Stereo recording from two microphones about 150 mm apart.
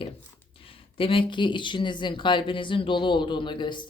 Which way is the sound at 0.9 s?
35° left (ahead or behind).